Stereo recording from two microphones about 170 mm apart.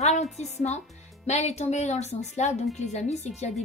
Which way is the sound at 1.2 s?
40° left (ahead or behind).